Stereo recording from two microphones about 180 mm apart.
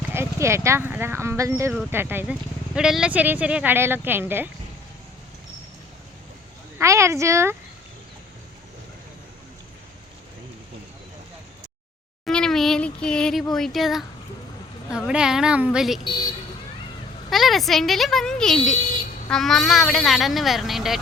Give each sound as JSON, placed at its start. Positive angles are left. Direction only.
{"t": 0.1, "sound": "speech", "side_deg": -15}
{"t": 6.7, "sound": "speech", "side_deg": -15}
{"t": 12.2, "sound": "speech", "side_deg": 5}
{"t": 17.2, "sound": "speech", "side_deg": 0}